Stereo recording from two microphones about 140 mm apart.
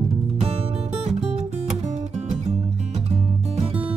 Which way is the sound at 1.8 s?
50° right (ahead or behind).